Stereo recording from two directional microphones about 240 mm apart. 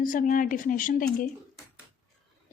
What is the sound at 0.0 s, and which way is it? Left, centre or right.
Speech, left.